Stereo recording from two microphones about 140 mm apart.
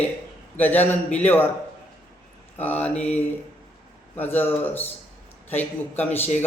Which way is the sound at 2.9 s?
50° left (ahead or behind).